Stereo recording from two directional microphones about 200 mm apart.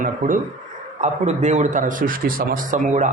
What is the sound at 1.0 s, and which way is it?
Speech, 35° right (ahead or behind).